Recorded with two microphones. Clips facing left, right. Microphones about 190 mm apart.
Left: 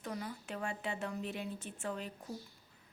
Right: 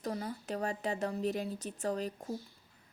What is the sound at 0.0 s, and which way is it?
Speech, 35° right (ahead or behind).